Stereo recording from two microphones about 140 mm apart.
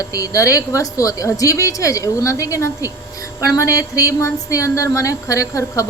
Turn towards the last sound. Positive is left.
turn(degrees=25)  # may be behind; listen again after turning